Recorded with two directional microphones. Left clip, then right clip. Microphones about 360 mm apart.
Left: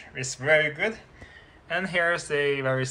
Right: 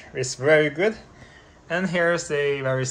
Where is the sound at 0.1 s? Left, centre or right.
Centre.